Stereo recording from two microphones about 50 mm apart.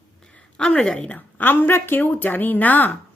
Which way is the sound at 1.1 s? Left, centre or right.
Left.